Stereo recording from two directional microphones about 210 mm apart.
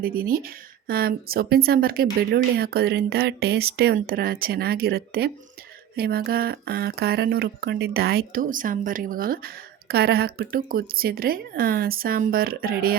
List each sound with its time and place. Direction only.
0.0 s speech: 45° right (ahead or behind)